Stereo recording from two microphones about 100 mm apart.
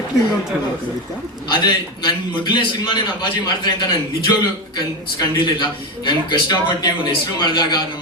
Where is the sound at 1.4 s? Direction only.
45° left (ahead or behind).